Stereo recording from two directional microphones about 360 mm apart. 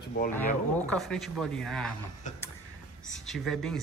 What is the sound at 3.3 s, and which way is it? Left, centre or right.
Speech, centre.